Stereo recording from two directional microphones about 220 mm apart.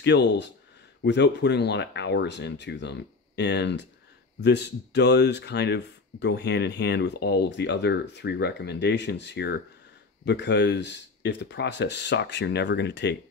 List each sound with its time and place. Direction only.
0.0 s speech: 50° left (ahead or behind)